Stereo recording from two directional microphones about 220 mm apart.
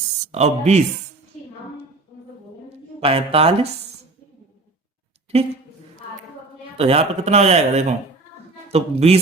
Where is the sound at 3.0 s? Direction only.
25° right (ahead or behind).